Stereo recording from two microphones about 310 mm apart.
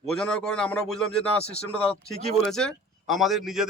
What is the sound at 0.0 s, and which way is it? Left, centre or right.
A man's voice, centre.